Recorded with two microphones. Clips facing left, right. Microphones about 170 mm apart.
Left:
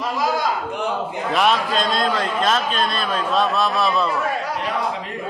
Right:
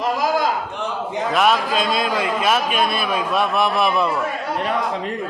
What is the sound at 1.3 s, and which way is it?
A man's voice, centre (ahead or behind).